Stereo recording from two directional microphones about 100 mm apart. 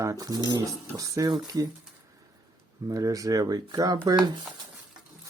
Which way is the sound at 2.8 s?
35° right (ahead or behind).